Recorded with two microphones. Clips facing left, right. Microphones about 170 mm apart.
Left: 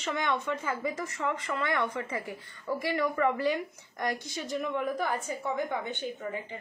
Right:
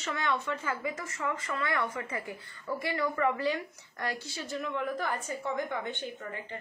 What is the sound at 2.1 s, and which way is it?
Speech, 15° left (ahead or behind).